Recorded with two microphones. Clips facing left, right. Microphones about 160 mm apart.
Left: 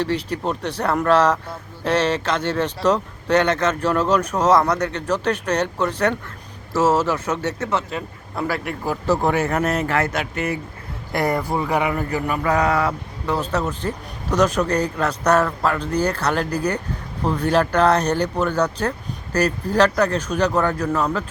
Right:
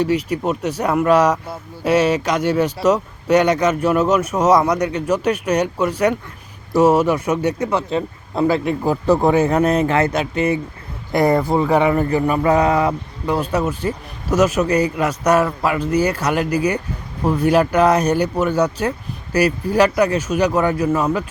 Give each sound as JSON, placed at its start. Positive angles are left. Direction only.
{"t": 0.0, "sound": "speech", "side_deg": -10}
{"t": 7.9, "sound": "speech", "side_deg": -25}